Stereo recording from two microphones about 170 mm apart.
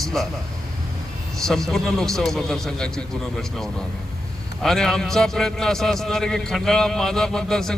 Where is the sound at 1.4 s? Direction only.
5° left (ahead or behind).